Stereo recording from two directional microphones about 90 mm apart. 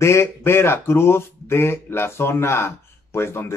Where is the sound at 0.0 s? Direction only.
30° left (ahead or behind).